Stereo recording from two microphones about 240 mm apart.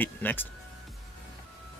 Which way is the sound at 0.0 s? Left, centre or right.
Centre.